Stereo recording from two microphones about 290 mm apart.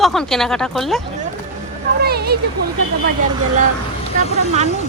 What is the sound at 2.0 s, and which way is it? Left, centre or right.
Speech, right.